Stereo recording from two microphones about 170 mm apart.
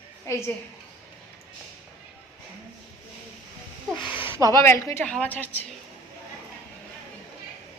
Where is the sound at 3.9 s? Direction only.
30° left (ahead or behind).